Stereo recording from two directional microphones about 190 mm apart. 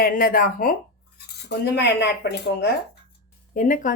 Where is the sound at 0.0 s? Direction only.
50° left (ahead or behind).